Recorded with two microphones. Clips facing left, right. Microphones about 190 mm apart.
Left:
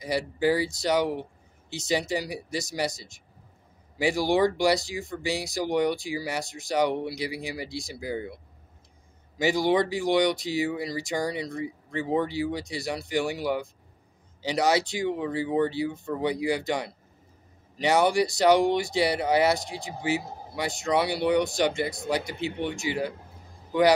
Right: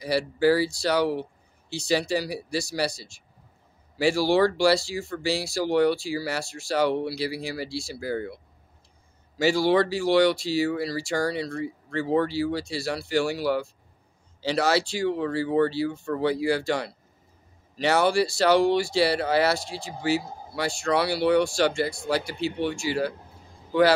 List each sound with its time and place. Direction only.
0.0 s speech: 20° left (ahead or behind)
9.4 s speech: 20° left (ahead or behind)